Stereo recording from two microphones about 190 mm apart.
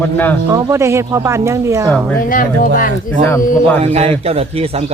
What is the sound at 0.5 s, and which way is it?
Speech, 15° right (ahead or behind).